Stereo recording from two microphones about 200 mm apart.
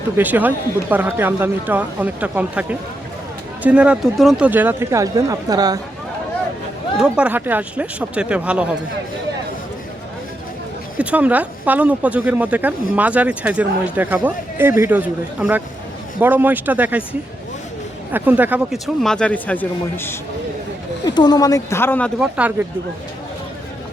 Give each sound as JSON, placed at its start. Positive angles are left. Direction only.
{"t": 0.2, "sound": "speech", "side_deg": -10}
{"t": 7.0, "sound": "speech", "side_deg": -5}
{"t": 10.9, "sound": "speech", "side_deg": -5}
{"t": 19.0, "sound": "speech", "side_deg": 5}
{"t": 21.0, "sound": "speech", "side_deg": 20}
{"t": 22.2, "sound": "speech", "side_deg": -5}